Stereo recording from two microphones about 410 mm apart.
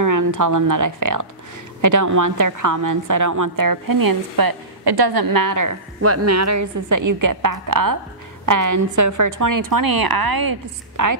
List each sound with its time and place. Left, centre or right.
0.0 s a woman's voice: right
5.9 s a woman's voice: right